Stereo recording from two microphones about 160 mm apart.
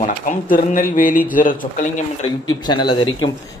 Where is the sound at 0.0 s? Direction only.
55° left (ahead or behind).